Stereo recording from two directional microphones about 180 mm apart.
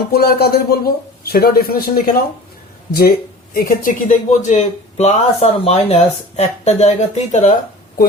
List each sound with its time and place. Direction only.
0.1 s a man's voice: 60° left (ahead or behind); by 7.5 s 40° left (ahead or behind)